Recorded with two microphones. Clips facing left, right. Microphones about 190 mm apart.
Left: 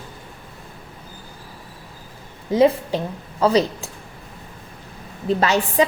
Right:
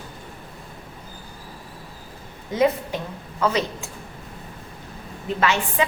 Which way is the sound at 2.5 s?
30° left (ahead or behind).